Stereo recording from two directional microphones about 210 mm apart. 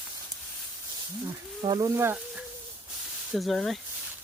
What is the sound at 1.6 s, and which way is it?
Speech, 20° right (ahead or behind).